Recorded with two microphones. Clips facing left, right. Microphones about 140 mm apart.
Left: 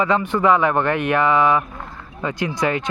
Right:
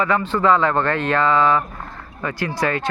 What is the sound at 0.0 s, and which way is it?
Speech, 15° left (ahead or behind).